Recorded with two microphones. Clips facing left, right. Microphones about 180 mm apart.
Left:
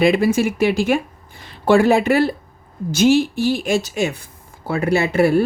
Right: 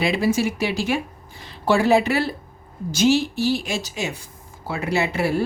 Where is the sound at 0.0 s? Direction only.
55° left (ahead or behind).